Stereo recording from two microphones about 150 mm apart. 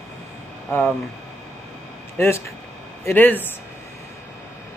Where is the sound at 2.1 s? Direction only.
15° left (ahead or behind).